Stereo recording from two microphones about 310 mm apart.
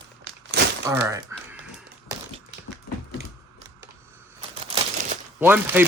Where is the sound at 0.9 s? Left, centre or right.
Centre.